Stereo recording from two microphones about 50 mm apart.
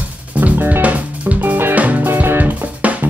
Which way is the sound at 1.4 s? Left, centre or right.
Right.